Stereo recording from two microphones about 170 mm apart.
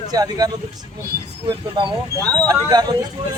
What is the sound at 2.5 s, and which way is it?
Speech, 25° right (ahead or behind).